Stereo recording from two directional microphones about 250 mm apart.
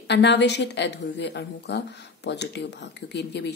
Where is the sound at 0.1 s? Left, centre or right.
Left.